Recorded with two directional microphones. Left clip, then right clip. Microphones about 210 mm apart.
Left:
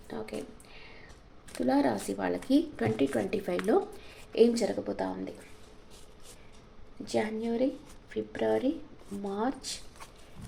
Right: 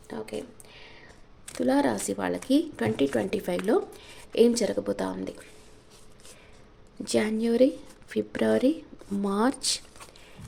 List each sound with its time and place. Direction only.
0.1 s a sound: 30° right (ahead or behind)
1.6 s speech: 30° right (ahead or behind)
7.0 s speech: 45° right (ahead or behind)